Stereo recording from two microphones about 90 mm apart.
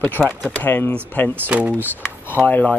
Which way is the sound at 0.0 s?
20° left (ahead or behind).